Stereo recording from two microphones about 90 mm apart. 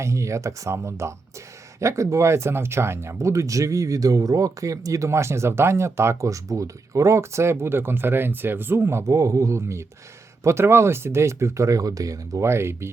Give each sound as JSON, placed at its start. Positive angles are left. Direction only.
{"t": 0.0, "sound": "speech", "side_deg": -35}